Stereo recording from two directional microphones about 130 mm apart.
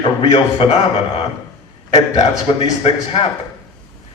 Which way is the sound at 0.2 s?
45° left (ahead or behind).